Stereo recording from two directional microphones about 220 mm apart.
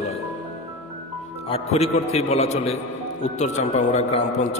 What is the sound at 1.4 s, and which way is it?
A man's voice, 25° left (ahead or behind).